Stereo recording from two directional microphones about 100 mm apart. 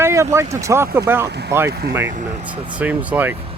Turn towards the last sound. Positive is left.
turn(degrees=-15)  # may be behind; listen again after turning